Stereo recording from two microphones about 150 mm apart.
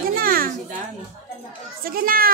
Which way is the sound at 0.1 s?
75° right (ahead or behind).